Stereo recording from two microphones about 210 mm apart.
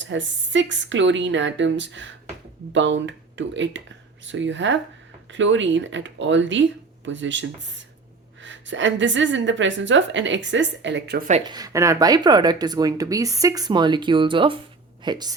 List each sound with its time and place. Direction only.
0.0 s a woman's voice: 60° right (ahead or behind)
11.4 s speech: 20° right (ahead or behind)